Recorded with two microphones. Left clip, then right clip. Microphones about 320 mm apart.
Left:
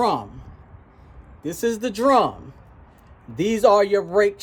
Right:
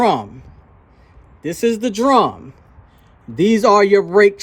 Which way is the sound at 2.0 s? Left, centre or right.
Right.